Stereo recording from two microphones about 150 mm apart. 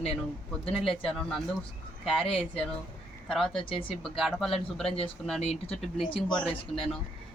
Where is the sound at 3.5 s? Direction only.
35° left (ahead or behind).